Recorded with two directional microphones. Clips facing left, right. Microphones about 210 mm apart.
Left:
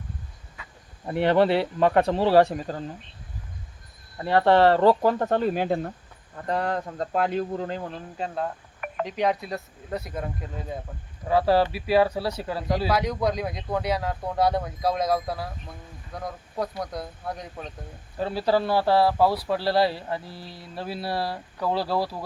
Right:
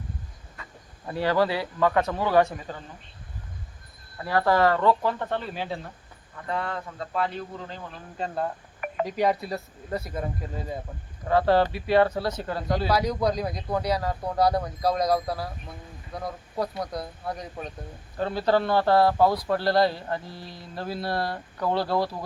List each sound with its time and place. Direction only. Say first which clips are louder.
1.0 s speech: left 4 dB; 25° left (ahead or behind)
4.2 s speech: left 4 dB; 25° left (ahead or behind); by 5.9 s 50° left (ahead or behind)
6.3 s speech: left 4 dB; 40° left (ahead or behind)
8.2 s speech: right 1 dB; 5° right (ahead or behind)